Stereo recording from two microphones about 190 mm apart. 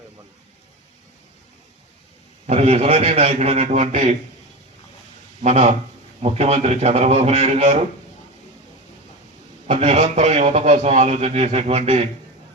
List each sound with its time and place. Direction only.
2.5 s a man's voice: 35° right (ahead or behind)
5.4 s a man's voice: 35° right (ahead or behind)
9.6 s a man's voice: 35° right (ahead or behind)